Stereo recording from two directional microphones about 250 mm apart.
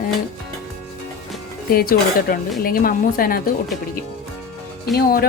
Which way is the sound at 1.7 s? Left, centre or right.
Left.